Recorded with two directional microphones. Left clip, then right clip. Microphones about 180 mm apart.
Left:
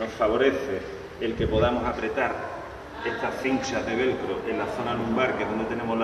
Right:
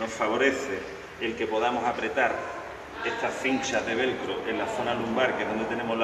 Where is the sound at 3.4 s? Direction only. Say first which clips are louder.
Even; 20° right (ahead or behind).